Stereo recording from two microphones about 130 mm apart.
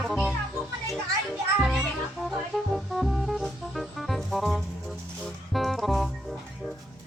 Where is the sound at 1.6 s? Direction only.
5° right (ahead or behind).